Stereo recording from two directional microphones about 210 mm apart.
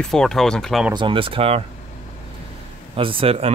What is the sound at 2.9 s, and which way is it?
Speech, 25° right (ahead or behind).